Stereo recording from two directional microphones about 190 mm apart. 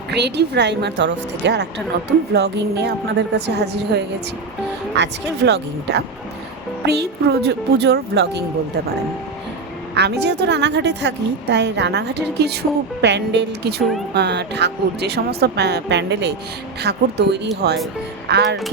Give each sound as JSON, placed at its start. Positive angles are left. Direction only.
{"t": 0.1, "sound": "a woman's voice", "side_deg": -65}
{"t": 9.9, "sound": "a woman's voice", "side_deg": -60}